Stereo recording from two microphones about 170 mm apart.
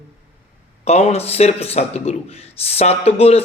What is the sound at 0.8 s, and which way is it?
A man's voice, 40° left (ahead or behind).